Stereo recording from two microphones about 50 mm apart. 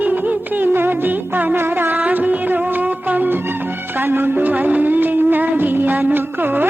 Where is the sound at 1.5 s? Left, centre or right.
Right.